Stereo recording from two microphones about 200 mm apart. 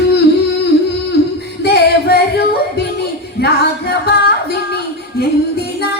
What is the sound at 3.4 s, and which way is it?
Singing, 55° left (ahead or behind).